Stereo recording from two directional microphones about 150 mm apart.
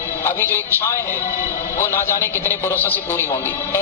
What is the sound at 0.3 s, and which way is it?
A man's voice, 15° left (ahead or behind).